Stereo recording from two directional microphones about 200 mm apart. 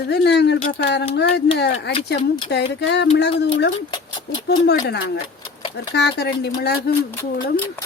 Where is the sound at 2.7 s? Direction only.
60° left (ahead or behind).